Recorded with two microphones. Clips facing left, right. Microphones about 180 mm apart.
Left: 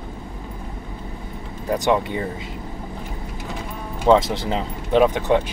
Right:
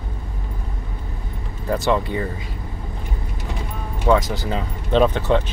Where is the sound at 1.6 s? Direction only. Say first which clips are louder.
Even; 20° left (ahead or behind).